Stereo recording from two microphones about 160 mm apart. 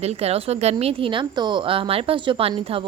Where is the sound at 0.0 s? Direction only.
40° right (ahead or behind).